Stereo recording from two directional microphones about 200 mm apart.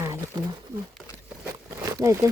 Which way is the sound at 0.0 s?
15° right (ahead or behind).